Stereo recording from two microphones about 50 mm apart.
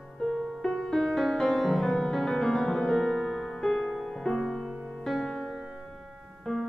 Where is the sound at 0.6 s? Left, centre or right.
Centre.